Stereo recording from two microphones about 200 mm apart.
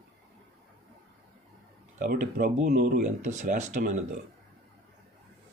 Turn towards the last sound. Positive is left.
turn(degrees=-35)  # may be behind; listen again after turning